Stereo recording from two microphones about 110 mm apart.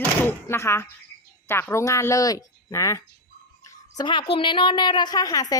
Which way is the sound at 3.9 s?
45° left (ahead or behind).